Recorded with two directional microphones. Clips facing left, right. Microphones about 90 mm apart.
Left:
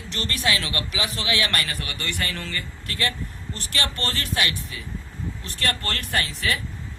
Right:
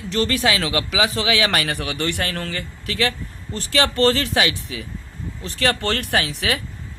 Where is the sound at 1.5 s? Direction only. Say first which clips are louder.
Right 6 dB; 80° right.